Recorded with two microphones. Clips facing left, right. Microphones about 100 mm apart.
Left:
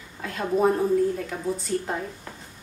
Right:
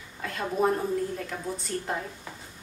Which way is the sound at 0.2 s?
Centre (ahead or behind).